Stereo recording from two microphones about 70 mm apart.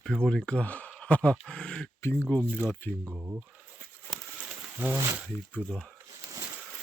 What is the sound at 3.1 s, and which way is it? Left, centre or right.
Speech, right.